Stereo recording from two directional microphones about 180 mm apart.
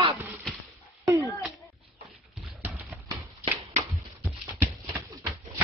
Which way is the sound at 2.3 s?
5° right (ahead or behind).